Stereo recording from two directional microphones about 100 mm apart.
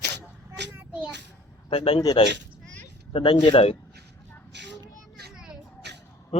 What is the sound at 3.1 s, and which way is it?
Speech, 60° left (ahead or behind).